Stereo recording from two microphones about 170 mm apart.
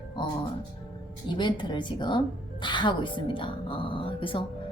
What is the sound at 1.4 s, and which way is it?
A woman's voice, 25° left (ahead or behind).